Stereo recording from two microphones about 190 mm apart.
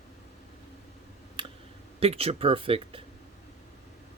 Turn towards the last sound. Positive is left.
turn(degrees=-30)  # may be behind; listen again after turning